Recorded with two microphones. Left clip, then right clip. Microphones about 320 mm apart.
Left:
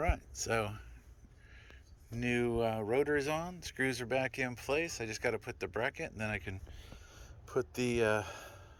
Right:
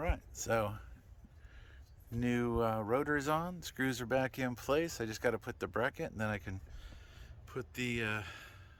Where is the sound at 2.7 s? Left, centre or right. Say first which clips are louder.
Left 2 dB; right.